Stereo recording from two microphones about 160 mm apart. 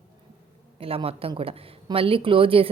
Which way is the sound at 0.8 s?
35° right (ahead or behind).